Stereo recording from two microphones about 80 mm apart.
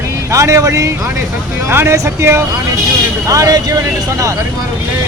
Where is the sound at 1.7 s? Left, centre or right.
Right.